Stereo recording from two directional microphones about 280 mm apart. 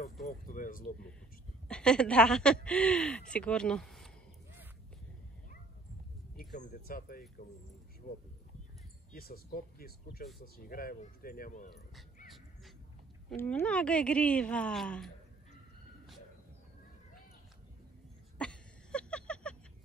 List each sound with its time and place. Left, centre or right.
0.3 s speech: left
1.7 s speech: centre
6.5 s speech: left
9.1 s speech: left
13.3 s speech: centre
18.4 s a sound: centre